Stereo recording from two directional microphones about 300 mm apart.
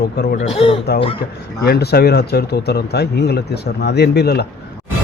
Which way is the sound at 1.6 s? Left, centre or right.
Left.